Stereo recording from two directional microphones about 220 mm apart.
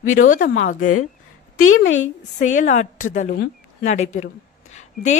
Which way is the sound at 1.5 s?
70° left (ahead or behind).